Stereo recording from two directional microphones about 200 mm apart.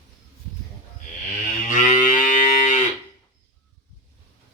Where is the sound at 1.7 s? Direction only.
40° left (ahead or behind).